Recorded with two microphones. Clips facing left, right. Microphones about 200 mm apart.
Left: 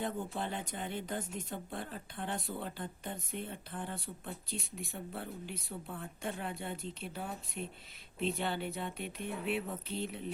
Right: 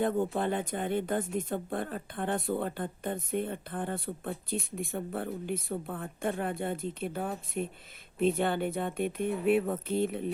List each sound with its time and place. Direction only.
0.0 s speech: 55° right (ahead or behind)